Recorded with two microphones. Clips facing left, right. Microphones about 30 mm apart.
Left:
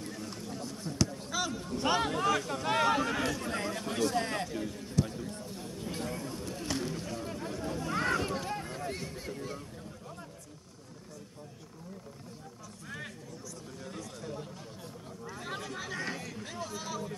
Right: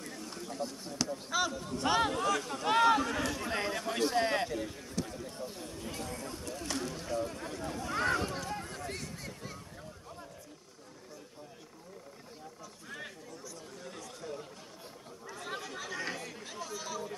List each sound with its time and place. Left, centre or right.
0.0 s a sound: centre
1.1 s speech: centre
1.5 s speech: centre
2.6 s speech: centre
3.3 s a man's voice: centre
5.0 s basketball bounce: centre
5.6 s speech: centre
5.9 s speech: centre
8.2 s a sound: centre
13.8 s speech: centre
15.2 s chatter: centre